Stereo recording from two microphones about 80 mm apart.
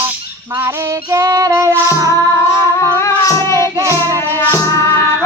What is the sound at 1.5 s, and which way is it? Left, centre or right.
Music, right.